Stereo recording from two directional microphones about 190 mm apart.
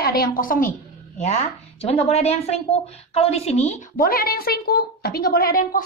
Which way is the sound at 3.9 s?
50° left (ahead or behind).